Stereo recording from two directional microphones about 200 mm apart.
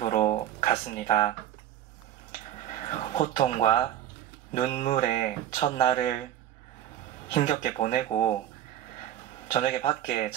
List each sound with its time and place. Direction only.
0.0 s a sound: 30° left (ahead or behind)
2.7 s speech: 25° left (ahead or behind)
7.4 s speech: 25° left (ahead or behind)
9.5 s speech: 25° left (ahead or behind)